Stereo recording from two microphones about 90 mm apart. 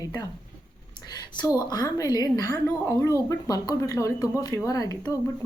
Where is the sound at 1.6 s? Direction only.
45° left (ahead or behind).